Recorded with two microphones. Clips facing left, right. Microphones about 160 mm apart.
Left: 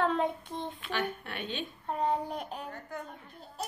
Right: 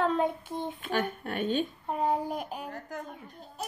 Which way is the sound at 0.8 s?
45° right (ahead or behind).